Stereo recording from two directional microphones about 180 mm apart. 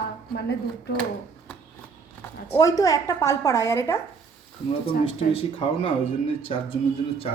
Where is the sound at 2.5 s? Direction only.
20° left (ahead or behind).